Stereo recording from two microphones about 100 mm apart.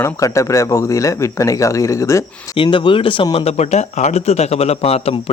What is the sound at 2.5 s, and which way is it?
Speech, 55° left (ahead or behind).